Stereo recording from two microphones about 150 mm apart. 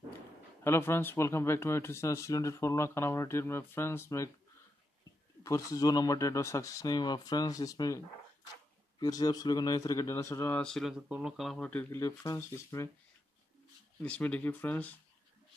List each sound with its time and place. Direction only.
0.7 s speech: 15° left (ahead or behind)
5.4 s speech: 20° left (ahead or behind)
9.0 s speech: 25° left (ahead or behind); by 12.0 s 10° left (ahead or behind)
12.0 s speech: 20° left (ahead or behind)
14.0 s speech: 10° left (ahead or behind)